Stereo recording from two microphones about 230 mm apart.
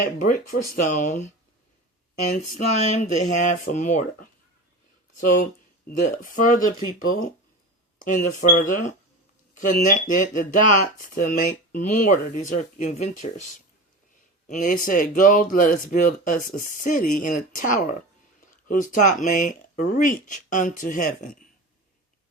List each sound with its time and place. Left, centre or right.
0.7 s speech: left
2.3 s speech: left
14.4 s speech: left